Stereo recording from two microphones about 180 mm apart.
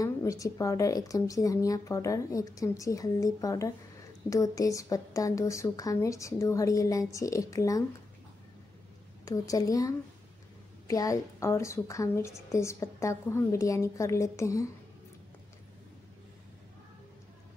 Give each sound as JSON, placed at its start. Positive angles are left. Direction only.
{"t": 0.0, "sound": "a woman's voice", "side_deg": 20}
{"t": 9.2, "sound": "a woman's voice", "side_deg": 20}